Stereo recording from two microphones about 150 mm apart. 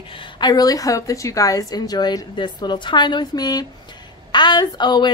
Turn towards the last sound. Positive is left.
turn(degrees=30)  # may be behind; listen again after turning